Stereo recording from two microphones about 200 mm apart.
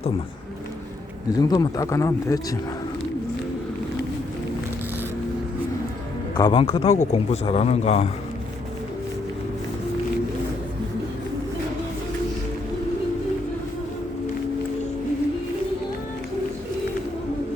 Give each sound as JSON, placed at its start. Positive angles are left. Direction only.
{"t": 1.3, "sound": "speech", "side_deg": 20}
{"t": 6.3, "sound": "speech", "side_deg": 25}